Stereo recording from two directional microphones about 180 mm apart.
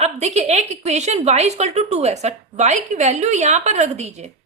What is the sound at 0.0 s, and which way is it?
A woman's voice, 40° right (ahead or behind).